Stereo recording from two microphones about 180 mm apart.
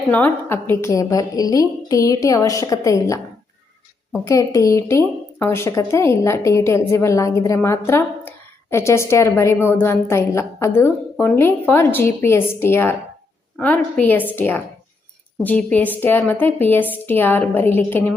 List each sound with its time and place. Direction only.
0.1 s a woman's voice: 10° left (ahead or behind)
4.3 s a woman's voice: 15° left (ahead or behind)